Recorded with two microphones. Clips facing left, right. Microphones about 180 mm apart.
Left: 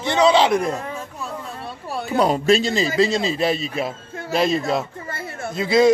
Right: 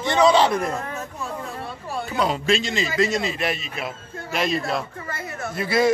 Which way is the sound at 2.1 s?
40° left (ahead or behind).